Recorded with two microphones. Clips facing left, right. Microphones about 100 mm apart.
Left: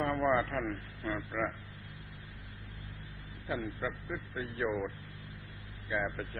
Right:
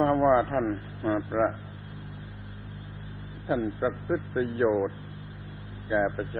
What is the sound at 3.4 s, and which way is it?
Speech, 35° right (ahead or behind).